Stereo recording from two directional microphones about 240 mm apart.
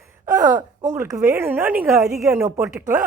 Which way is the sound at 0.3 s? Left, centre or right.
Centre.